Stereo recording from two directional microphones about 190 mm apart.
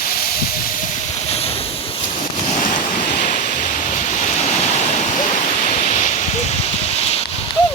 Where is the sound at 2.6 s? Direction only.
45° left (ahead or behind).